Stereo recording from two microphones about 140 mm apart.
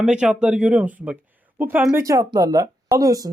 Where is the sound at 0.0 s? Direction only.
5° right (ahead or behind).